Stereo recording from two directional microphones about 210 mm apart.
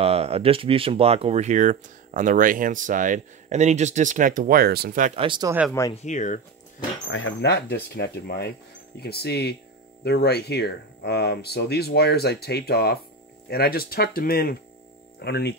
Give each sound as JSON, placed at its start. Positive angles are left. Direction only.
{"t": 0.0, "sound": "speech", "side_deg": -30}
{"t": 5.1, "sound": "speech", "side_deg": -25}
{"t": 5.7, "sound": "speech", "side_deg": 15}
{"t": 6.0, "sound": "speech", "side_deg": 35}
{"t": 7.1, "sound": "speech", "side_deg": 65}